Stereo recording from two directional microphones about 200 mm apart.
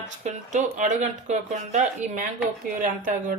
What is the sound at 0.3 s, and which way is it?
Speech, 40° right (ahead or behind).